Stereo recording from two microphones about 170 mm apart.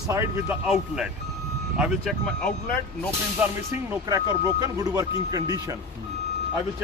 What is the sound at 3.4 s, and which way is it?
Speech, 10° right (ahead or behind).